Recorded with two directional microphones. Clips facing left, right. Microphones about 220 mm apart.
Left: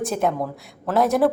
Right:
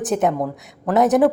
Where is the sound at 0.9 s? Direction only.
20° right (ahead or behind).